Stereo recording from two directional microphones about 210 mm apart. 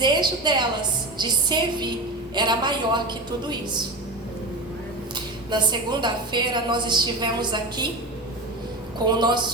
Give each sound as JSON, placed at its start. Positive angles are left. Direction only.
{"t": 0.0, "sound": "a woman's voice", "side_deg": -20}
{"t": 5.1, "sound": "a woman's voice", "side_deg": -20}
{"t": 9.0, "sound": "a woman's voice", "side_deg": -20}